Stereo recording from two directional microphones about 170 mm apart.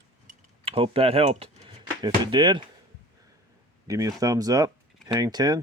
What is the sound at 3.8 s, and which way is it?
Speech, 20° right (ahead or behind).